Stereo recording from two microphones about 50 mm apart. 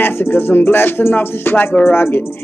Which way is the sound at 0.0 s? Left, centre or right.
Left.